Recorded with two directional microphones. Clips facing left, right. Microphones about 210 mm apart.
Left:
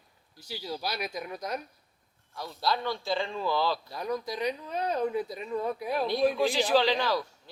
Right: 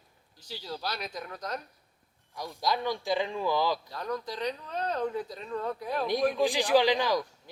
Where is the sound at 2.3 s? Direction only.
15° right (ahead or behind).